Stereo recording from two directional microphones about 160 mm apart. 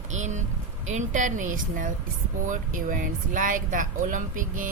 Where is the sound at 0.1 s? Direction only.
50° right (ahead or behind).